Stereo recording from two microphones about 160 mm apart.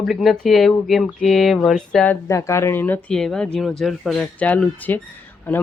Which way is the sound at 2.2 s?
20° left (ahead or behind).